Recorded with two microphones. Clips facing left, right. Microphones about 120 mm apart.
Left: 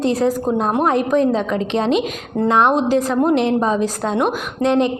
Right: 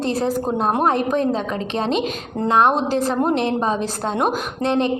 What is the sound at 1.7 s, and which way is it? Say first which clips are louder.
Speech: left 3 dB; 15° left (ahead or behind).